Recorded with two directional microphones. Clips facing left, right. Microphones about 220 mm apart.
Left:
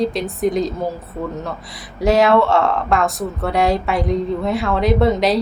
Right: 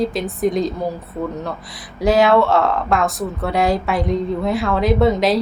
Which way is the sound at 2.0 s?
Centre (ahead or behind).